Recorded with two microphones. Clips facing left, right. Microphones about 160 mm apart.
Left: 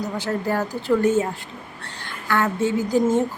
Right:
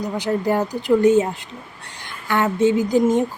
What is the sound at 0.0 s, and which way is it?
Speech, 15° right (ahead or behind).